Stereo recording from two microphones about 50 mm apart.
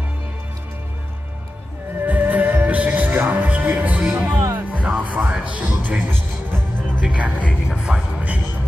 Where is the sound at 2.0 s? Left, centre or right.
Right.